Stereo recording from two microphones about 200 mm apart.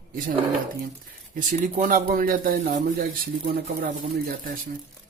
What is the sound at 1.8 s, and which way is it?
A man's voice, 40° right (ahead or behind).